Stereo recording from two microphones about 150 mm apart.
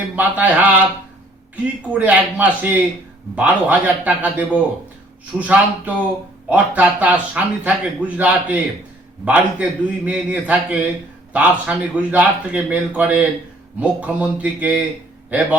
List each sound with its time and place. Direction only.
0.2 s speech: 10° right (ahead or behind)
1.9 s speech: 10° right (ahead or behind)